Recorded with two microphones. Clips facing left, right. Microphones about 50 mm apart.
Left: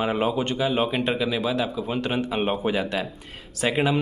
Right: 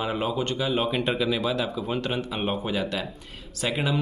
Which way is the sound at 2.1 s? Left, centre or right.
Centre.